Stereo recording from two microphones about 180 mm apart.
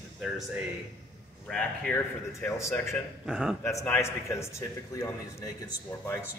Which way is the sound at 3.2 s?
5° right (ahead or behind).